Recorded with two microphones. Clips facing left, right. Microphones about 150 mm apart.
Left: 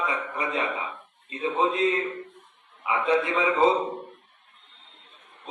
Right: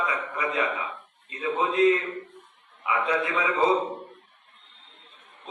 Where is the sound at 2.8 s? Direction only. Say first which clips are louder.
Even; centre (ahead or behind).